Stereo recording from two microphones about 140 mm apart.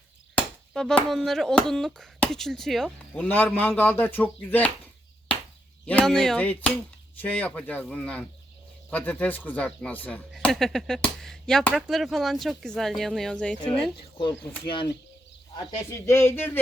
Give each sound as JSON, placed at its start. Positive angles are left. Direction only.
{"t": 0.7, "sound": "speech", "side_deg": 5}
{"t": 3.2, "sound": "speech", "side_deg": 15}
{"t": 5.8, "sound": "speech", "side_deg": 10}
{"t": 14.7, "sound": "speech", "side_deg": 35}
{"t": 16.0, "sound": "speech", "side_deg": 20}